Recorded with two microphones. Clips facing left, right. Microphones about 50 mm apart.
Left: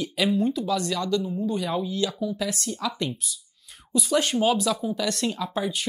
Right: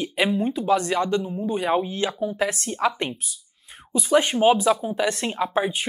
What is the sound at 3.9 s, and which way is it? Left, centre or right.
Speech, right.